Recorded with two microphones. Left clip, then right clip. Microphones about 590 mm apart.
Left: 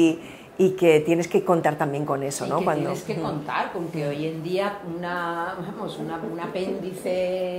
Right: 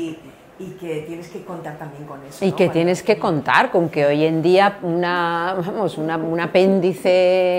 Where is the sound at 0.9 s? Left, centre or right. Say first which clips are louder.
Left 9 dB; left.